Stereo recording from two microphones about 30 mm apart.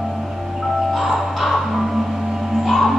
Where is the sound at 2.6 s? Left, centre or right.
Centre.